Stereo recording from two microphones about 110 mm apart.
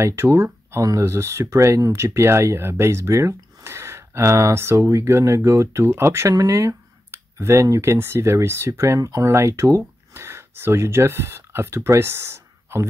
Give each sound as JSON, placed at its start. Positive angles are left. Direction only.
{"t": 0.0, "sound": "speech", "side_deg": -25}